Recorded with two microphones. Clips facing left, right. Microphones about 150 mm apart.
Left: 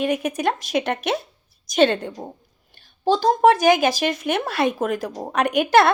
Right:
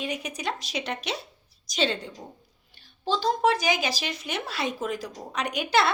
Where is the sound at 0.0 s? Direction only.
50° left (ahead or behind).